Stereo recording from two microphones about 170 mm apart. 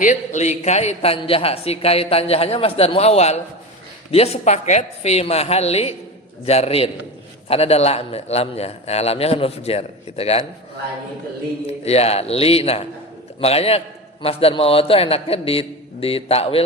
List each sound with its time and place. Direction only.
0.0 s a man's voice: 45° left (ahead or behind)
11.6 s a man's voice: 40° left (ahead or behind)